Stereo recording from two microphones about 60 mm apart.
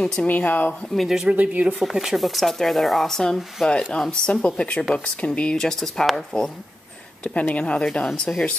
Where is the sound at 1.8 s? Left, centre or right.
Centre.